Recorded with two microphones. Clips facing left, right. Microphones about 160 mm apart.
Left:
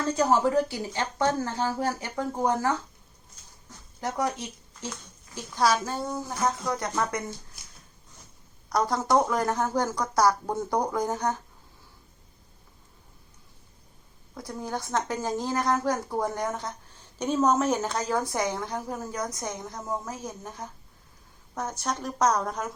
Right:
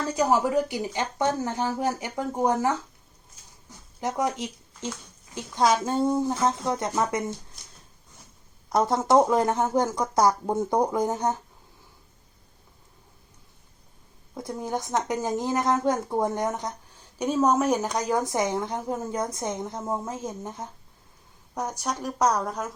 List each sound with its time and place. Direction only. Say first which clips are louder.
0.1 s speech: even; 10° right (ahead or behind)
4.0 s a woman's voice: right 2 dB; 20° right (ahead or behind)
7.6 s a sound: right 1 dB; 5° left (ahead or behind)
8.7 s a woman's voice: right 3 dB; 25° right (ahead or behind)
14.3 s a woman's voice: right 3 dB; 20° right (ahead or behind); by 22.7 s 5° right (ahead or behind)